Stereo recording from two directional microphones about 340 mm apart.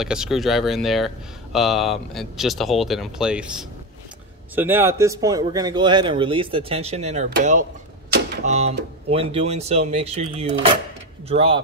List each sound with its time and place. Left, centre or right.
0.0 s speech: centre